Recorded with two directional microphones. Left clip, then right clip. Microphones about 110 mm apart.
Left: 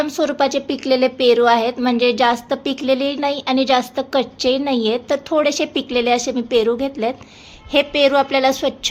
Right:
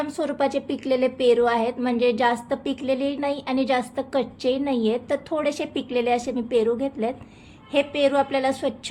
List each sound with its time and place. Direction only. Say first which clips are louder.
0.0 s a woman's voice: left 7 dB; 35° left (ahead or behind)